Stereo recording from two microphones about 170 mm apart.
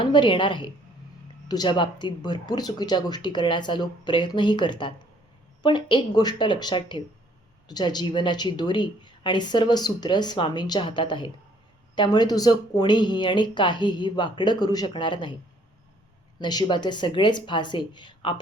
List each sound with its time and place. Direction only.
0.0 s a woman's voice: 30° left (ahead or behind)
16.4 s a woman's voice: 25° left (ahead or behind)